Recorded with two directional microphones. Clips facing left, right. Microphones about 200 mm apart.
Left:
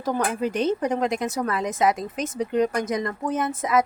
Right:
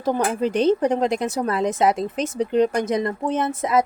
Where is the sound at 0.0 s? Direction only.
30° right (ahead or behind).